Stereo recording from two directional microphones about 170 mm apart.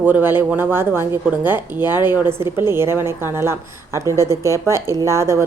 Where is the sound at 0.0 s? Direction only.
10° right (ahead or behind).